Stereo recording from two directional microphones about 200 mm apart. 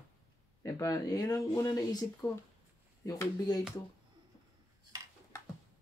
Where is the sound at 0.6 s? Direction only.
15° left (ahead or behind).